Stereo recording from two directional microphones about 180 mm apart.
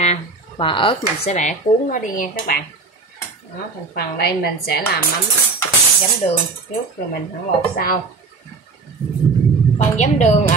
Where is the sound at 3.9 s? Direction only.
60° left (ahead or behind).